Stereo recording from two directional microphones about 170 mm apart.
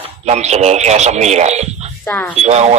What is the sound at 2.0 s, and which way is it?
Speech, 20° left (ahead or behind).